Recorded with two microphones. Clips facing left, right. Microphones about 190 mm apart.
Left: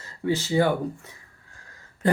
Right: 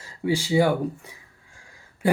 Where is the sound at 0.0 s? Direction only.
10° right (ahead or behind).